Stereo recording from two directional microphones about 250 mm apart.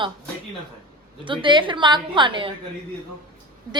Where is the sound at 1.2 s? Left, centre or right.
Centre.